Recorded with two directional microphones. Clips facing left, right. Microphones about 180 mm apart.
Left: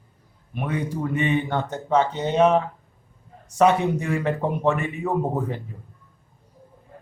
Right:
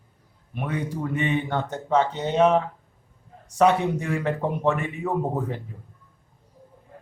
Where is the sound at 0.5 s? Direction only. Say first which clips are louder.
Left 2 dB; 15° left (ahead or behind).